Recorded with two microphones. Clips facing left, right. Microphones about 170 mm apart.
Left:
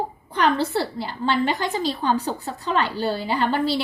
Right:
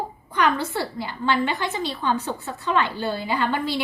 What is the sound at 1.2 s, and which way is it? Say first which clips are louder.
A woman's voice: left 1 dB; 35° left (ahead or behind).